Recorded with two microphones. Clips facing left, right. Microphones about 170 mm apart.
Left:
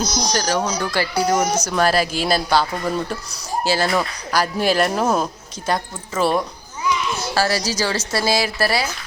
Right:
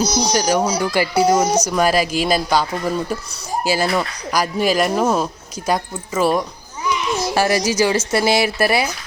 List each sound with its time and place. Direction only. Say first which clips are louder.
0.0 s a woman's voice: right 4 dB; 10° right (ahead or behind)
7.3 s speech: right 4 dB; 20° right (ahead or behind)